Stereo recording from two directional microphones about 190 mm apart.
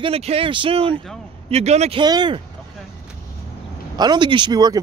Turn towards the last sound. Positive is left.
turn(degrees=-20)  # may be behind; listen again after turning